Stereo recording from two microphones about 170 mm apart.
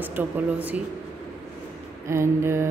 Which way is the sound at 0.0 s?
10° right (ahead or behind).